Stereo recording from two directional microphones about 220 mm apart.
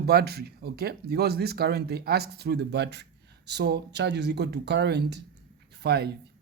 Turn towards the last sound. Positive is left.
turn(degrees=-50)  # may be behind; listen again after turning